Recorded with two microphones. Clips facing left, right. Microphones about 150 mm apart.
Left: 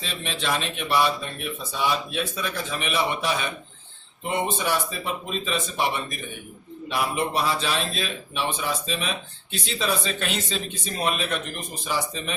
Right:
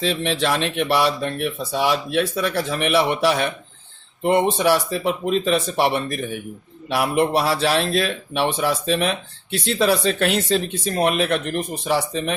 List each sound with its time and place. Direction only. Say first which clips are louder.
0.0 s a man's voice: right 9 dB; 70° right (ahead or behind)